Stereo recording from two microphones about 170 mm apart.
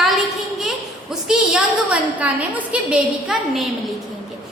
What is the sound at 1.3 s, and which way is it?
A woman's voice, 5° right (ahead or behind).